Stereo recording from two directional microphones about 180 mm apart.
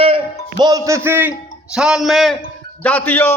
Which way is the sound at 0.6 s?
20° right (ahead or behind).